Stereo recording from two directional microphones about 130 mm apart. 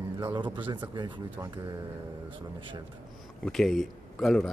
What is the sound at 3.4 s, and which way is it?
Speech, 5° left (ahead or behind).